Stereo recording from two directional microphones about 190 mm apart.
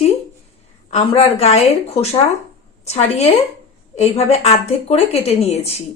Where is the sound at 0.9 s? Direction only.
35° left (ahead or behind).